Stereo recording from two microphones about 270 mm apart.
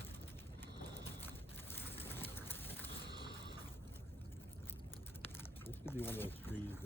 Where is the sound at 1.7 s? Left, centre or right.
Centre.